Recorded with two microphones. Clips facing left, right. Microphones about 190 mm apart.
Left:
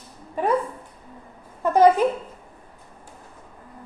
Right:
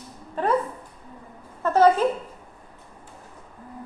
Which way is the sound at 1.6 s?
15° left (ahead or behind).